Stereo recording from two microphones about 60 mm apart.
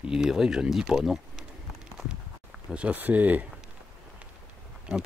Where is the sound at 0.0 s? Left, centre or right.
Centre.